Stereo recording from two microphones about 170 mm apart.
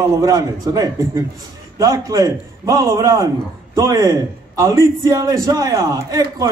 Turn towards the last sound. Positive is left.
turn(degrees=-20)  # may be behind; listen again after turning